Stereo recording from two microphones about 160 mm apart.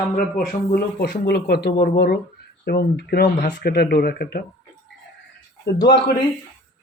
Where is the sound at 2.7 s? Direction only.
85° left.